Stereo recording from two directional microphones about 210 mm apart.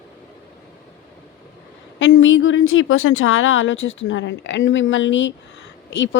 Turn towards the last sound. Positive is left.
turn(degrees=60)  # may be behind; listen again after turning